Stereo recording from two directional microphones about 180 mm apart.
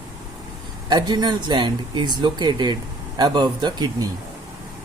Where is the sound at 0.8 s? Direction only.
25° right (ahead or behind).